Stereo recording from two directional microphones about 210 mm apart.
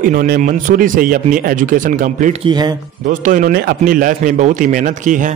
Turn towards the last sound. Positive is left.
turn(degrees=-40)  # may be behind; listen again after turning